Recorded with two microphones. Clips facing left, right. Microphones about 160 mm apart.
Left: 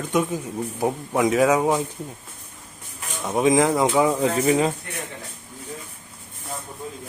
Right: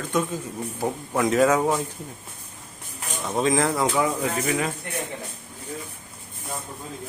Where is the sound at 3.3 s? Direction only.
15° left (ahead or behind).